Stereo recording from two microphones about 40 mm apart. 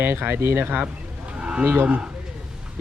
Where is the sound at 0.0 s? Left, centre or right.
Right.